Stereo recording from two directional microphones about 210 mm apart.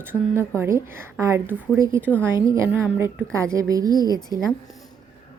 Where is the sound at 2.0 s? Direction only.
10° left (ahead or behind).